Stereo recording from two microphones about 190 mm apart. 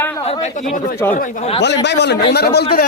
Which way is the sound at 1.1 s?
35° left (ahead or behind).